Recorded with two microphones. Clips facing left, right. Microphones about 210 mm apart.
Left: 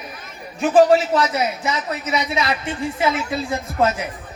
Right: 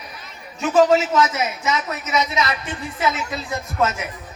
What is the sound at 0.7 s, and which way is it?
A man's voice, 35° left (ahead or behind).